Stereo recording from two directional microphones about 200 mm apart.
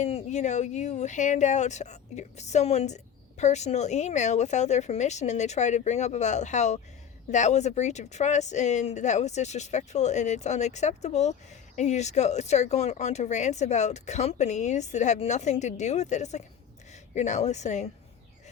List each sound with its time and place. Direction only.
0.0 s speech: 30° left (ahead or behind)